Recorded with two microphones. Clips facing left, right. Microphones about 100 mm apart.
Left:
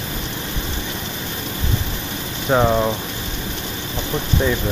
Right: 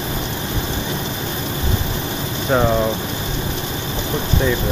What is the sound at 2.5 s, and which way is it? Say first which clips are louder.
Speech: left 1 dB; 5° left (ahead or behind).